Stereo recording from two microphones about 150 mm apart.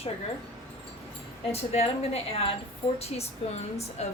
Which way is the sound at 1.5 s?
45° left (ahead or behind).